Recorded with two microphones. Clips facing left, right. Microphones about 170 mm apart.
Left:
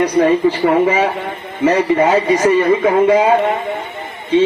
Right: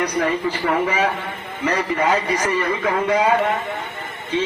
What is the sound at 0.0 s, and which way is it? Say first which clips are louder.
Speech: left 9 dB; 25° left (ahead or behind).